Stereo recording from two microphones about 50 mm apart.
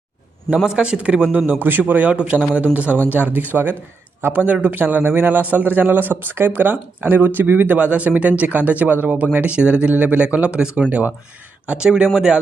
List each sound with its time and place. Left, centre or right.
0.6 s a man's voice: centre
1.5 s a man's voice: right
1.9 s a man's voice: right
11.6 s speech: centre